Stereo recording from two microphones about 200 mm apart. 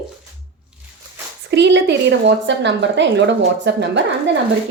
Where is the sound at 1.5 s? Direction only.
60° right (ahead or behind).